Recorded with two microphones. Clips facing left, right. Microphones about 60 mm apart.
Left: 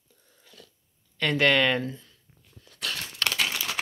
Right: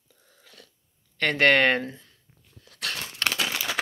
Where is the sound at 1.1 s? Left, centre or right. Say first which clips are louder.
Right 2 dB; right.